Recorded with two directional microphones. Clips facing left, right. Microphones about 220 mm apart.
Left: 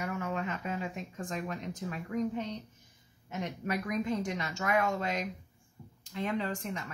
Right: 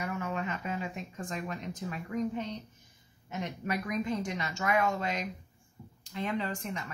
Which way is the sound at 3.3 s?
45° left (ahead or behind).